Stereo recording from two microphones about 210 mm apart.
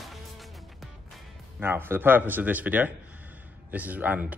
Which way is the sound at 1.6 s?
10° right (ahead or behind).